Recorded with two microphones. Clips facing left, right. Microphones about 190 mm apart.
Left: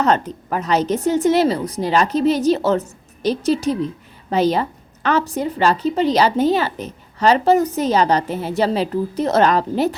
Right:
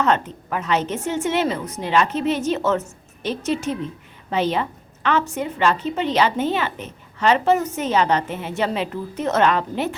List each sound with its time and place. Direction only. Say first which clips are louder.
0.0 s a woman's voice: left 2 dB; 40° left (ahead or behind)